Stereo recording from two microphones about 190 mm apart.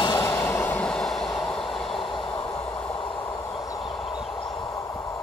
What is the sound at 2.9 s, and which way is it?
Train, 30° left (ahead or behind).